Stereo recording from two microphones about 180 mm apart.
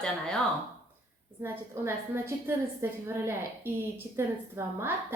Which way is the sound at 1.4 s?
15° right (ahead or behind).